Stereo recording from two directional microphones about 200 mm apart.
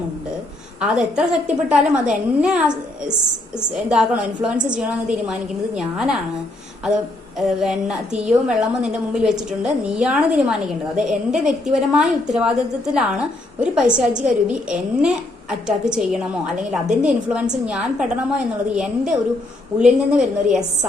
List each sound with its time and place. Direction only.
0.8 s a woman's voice: 5° right (ahead or behind)